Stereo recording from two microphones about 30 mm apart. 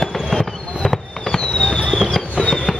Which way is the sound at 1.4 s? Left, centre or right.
Left.